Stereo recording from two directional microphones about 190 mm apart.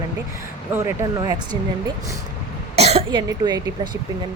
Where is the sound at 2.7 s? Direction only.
35° right (ahead or behind).